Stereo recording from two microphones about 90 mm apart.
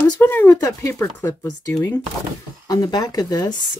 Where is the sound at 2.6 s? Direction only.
45° left (ahead or behind).